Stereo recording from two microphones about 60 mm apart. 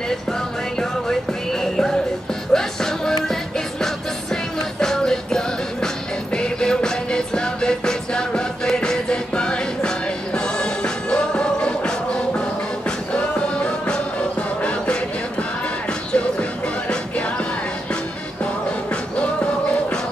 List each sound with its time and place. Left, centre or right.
0.7 s music: centre
13.1 s music: centre
16.1 s music: centre